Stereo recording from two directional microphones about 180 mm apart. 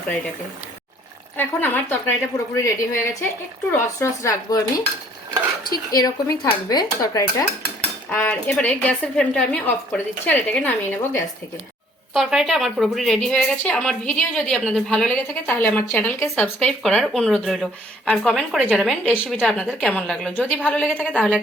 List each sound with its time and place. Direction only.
1.4 s speech: 10° left (ahead or behind)
5.6 s speech: 20° left (ahead or behind)
20.8 s speech: 5° right (ahead or behind)